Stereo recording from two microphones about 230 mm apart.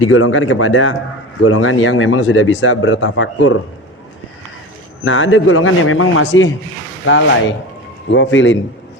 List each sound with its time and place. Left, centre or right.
0.0 s speech: left
5.0 s a man's voice: left